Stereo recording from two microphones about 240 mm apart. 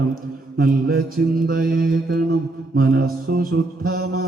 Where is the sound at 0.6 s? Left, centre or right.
Right.